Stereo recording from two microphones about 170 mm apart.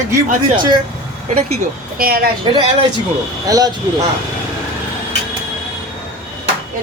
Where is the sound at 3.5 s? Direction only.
20° right (ahead or behind).